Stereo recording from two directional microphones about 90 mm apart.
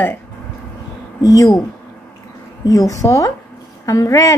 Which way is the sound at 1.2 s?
40° left (ahead or behind).